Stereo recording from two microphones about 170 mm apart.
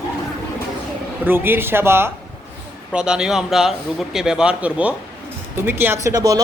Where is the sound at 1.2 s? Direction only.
10° right (ahead or behind).